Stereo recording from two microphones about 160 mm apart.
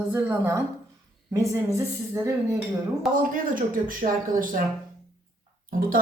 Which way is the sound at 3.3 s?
60° right (ahead or behind).